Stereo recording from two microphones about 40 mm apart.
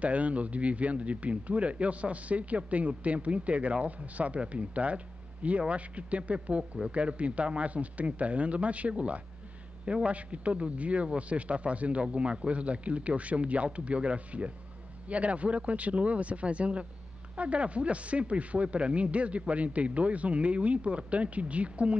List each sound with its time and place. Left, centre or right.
0.0 s speech: right